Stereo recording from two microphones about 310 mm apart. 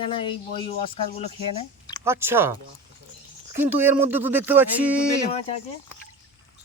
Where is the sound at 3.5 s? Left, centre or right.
Centre.